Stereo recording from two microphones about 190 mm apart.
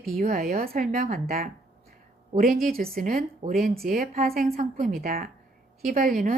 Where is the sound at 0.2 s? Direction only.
45° right (ahead or behind).